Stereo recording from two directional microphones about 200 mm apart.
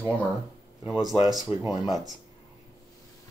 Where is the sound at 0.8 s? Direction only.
20° right (ahead or behind).